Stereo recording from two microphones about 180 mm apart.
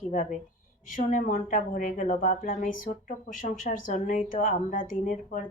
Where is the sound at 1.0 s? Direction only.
45° left (ahead or behind).